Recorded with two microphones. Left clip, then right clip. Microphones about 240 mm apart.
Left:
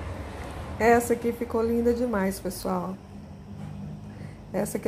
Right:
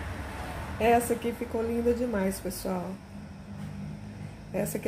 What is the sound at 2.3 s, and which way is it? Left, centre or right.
Speech, left.